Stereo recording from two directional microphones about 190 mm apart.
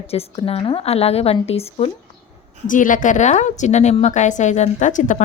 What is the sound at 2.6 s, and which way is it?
A woman's voice, 45° left (ahead or behind).